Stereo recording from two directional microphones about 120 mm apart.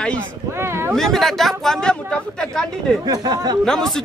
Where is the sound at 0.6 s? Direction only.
20° right (ahead or behind).